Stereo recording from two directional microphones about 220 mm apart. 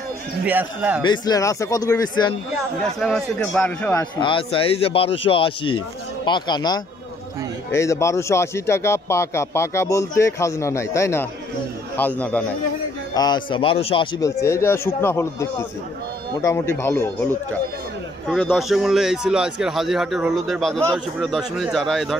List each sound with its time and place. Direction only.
0.5 s a man's voice: 5° right (ahead or behind)
1.0 s speech: 20° left (ahead or behind)
3.0 s a man's voice: 5° left (ahead or behind)
4.2 s a man's voice: 25° left (ahead or behind); by 12.4 s 5° left (ahead or behind)
13.1 s speech: 20° left (ahead or behind)
16.4 s a man's voice: 10° left (ahead or behind)